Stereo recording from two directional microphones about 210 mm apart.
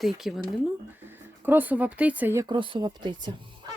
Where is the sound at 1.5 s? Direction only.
10° right (ahead or behind).